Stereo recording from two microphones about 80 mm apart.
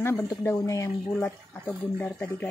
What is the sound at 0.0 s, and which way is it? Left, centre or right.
Speech, left.